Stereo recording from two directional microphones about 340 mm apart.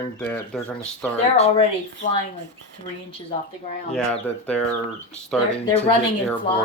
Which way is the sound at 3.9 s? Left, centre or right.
Centre.